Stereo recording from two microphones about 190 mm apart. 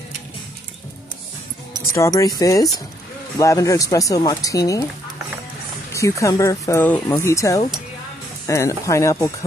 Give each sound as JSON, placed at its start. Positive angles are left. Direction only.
{"t": 2.0, "sound": "speech", "side_deg": 15}
{"t": 5.9, "sound": "speech", "side_deg": 15}